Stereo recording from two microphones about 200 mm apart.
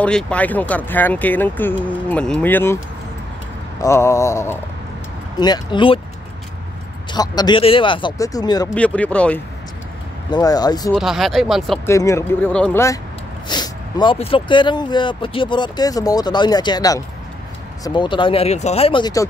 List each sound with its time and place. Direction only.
0.0 s speech: 5° left (ahead or behind)
3.8 s speech: 15° left (ahead or behind)
7.1 s speech: 20° left (ahead or behind)
8.7 s speech: 5° left (ahead or behind)
10.3 s speech: 20° left (ahead or behind)
11.0 s speech: centre (ahead or behind)
11.8 s speech: 15° left (ahead or behind)